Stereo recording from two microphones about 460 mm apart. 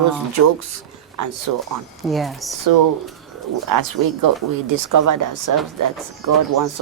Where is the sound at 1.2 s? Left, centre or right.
Right.